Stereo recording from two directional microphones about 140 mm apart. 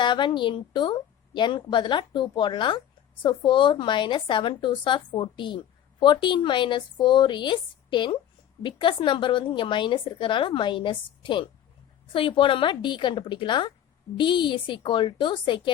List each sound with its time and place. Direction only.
0.0 s a woman's voice: 35° left (ahead or behind)